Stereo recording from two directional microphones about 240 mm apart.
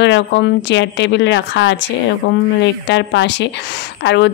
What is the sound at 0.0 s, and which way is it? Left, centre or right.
Speech, left.